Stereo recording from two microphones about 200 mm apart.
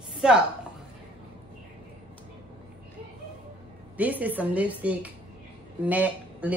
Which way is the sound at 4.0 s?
10° right (ahead or behind).